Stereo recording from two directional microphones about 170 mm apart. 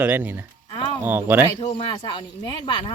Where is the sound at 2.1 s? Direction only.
25° left (ahead or behind).